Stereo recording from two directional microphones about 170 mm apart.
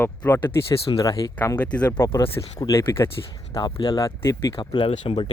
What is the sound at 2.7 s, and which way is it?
Speech, 15° left (ahead or behind).